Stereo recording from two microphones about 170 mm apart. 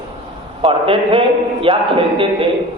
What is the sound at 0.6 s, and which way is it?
A man's voice, 30° right (ahead or behind).